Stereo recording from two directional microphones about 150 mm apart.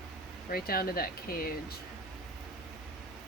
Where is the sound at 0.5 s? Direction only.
80° left.